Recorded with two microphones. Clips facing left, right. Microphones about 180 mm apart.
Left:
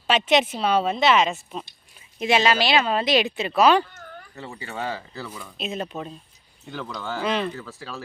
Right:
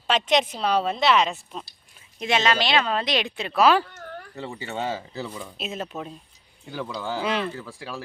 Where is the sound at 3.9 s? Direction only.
65° right (ahead or behind).